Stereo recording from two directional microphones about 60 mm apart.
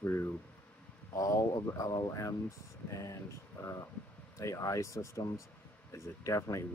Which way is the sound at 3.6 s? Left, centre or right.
Left.